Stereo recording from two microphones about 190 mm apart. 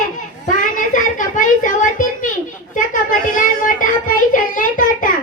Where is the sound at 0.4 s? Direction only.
45° left (ahead or behind).